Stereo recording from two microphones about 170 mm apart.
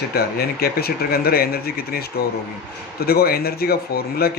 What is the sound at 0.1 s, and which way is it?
Speech, 65° left (ahead or behind).